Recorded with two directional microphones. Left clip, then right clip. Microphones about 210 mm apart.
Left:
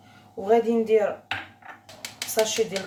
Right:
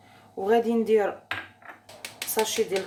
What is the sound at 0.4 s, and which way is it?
Speech, 55° right (ahead or behind).